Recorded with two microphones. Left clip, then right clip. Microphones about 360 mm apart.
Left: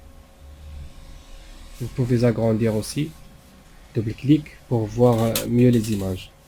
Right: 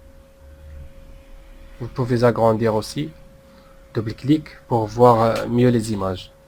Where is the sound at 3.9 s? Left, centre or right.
Right.